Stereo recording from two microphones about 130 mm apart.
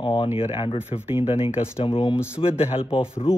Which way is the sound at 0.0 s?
40° left (ahead or behind).